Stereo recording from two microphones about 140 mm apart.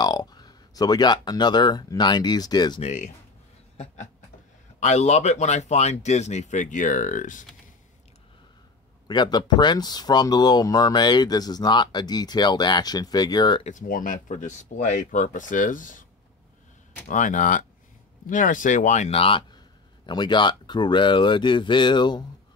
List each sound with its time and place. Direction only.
0.0 s speech: 30° left (ahead or behind)
2.8 s speech: 55° left (ahead or behind)
3.7 s a sound: 55° left (ahead or behind)
4.7 s speech: 55° left (ahead or behind)
9.0 s speech: 30° left (ahead or behind)
13.7 s speech: 70° left (ahead or behind)
17.1 s speech: 65° left (ahead or behind); by 22.2 s 35° left (ahead or behind)